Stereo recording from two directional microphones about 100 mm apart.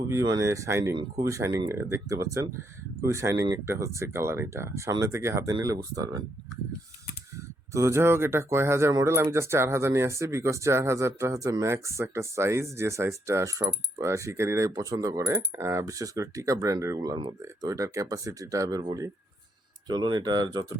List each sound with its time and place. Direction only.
0.1 s speech: 30° right (ahead or behind)
7.7 s speech: 30° right (ahead or behind)
19.9 s speech: 45° right (ahead or behind)